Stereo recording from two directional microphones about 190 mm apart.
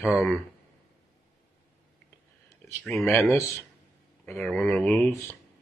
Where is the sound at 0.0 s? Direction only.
Centre (ahead or behind).